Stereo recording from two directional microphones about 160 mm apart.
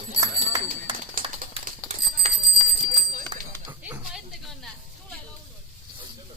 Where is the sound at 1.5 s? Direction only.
40° right (ahead or behind).